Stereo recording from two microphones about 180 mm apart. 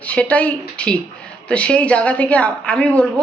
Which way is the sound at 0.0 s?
10° left (ahead or behind).